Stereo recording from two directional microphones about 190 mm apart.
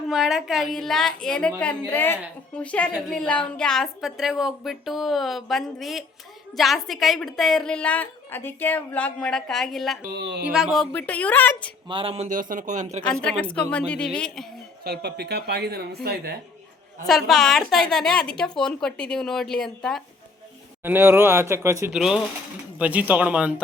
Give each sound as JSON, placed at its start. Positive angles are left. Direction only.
{"t": 0.1, "sound": "a woman's voice", "side_deg": 0}
{"t": 10.1, "sound": "speech", "side_deg": -60}
{"t": 10.4, "sound": "a woman's voice", "side_deg": -5}
{"t": 11.9, "sound": "a man's voice", "side_deg": -30}
{"t": 13.2, "sound": "a woman's voice", "side_deg": 5}
{"t": 14.8, "sound": "speech", "side_deg": -60}
{"t": 17.1, "sound": "a woman's voice", "side_deg": 0}
{"t": 20.8, "sound": "speech", "side_deg": -10}
{"t": 21.9, "sound": "a woman's voice", "side_deg": -5}